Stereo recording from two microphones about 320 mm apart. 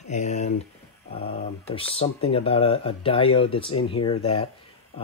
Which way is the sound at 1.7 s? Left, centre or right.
Centre.